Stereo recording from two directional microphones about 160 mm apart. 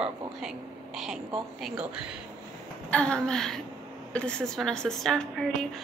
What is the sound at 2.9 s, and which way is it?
A woman's voice, 5° left (ahead or behind).